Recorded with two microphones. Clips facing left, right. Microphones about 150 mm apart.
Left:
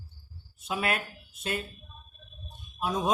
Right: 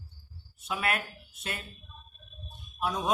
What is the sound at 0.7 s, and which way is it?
Speech, 30° left (ahead or behind).